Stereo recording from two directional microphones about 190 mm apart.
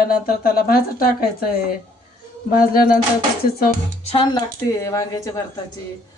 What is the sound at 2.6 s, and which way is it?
A woman's voice, 50° left (ahead or behind).